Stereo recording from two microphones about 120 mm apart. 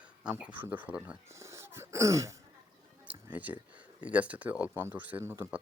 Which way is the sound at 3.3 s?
15° right (ahead or behind).